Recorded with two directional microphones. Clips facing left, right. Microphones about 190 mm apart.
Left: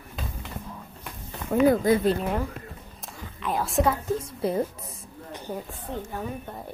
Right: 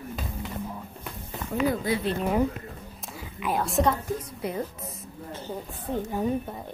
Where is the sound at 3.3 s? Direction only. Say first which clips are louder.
Even; 5° right (ahead or behind).